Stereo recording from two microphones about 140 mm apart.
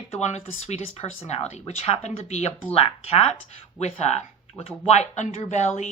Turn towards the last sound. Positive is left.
turn(degrees=55)  # may be behind; listen again after turning